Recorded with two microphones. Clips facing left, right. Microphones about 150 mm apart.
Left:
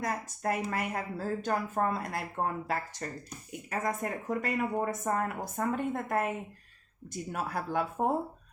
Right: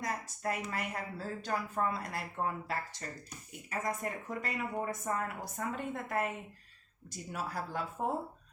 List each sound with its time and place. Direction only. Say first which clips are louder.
0.0 s speech: left 4 dB; 50° left (ahead or behind)